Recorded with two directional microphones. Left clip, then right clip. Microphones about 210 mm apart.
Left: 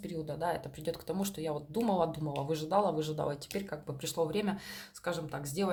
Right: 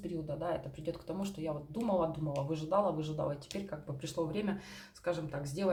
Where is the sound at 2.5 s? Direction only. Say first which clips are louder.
Left 2 dB; 50° left (ahead or behind).